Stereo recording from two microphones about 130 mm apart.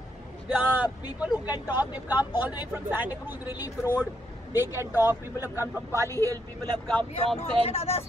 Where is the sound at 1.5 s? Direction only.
30° left (ahead or behind).